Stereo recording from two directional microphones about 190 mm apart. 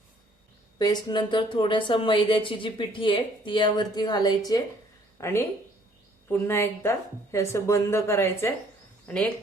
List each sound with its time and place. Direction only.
0.8 s a woman's voice: 20° left (ahead or behind)